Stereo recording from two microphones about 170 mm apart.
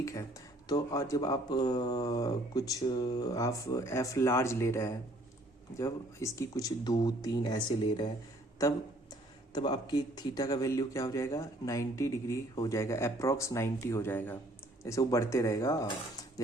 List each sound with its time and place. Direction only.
0.0 s speech: 20° left (ahead or behind)